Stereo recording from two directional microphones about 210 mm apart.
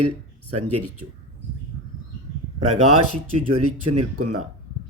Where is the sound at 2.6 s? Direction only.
90° right.